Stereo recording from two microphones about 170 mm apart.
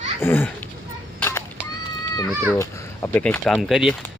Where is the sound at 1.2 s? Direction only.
15° left (ahead or behind).